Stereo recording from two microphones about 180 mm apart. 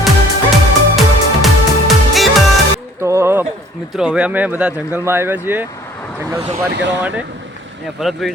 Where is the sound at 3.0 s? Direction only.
15° right (ahead or behind).